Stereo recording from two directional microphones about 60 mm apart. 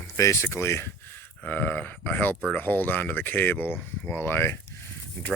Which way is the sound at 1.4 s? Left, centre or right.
Left.